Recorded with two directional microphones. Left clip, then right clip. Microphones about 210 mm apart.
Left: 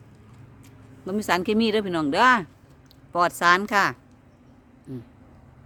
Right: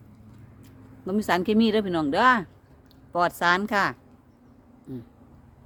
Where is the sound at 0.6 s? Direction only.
5° left (ahead or behind).